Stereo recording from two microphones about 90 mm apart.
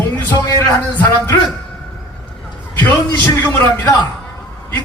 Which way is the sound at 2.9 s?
20° left (ahead or behind).